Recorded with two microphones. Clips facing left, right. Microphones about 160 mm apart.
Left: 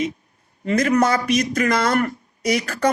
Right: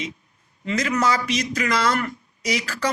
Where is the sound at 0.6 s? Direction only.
50° left (ahead or behind).